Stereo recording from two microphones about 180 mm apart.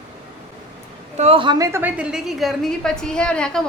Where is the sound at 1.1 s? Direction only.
35° right (ahead or behind).